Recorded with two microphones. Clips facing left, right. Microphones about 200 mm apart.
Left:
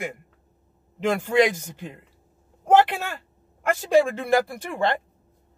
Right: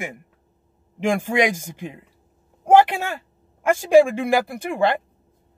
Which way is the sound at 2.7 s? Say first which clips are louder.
Right 3 dB; 15° right (ahead or behind).